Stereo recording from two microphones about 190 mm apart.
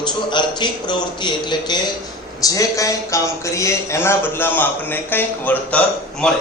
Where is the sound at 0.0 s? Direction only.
25° left (ahead or behind); by 6.3 s 5° left (ahead or behind).